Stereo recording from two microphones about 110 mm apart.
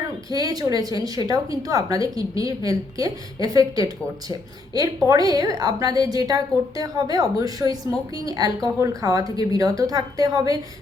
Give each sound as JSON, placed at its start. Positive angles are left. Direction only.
{"t": 0.3, "sound": "a woman's voice", "side_deg": -35}